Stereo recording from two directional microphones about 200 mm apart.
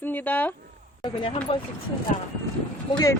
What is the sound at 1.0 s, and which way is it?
Speech, 25° left (ahead or behind).